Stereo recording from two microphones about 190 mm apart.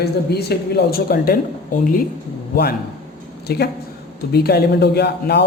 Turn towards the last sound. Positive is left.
turn(degrees=60)  # may be behind; listen again after turning